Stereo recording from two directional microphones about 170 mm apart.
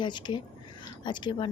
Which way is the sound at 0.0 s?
25° left (ahead or behind).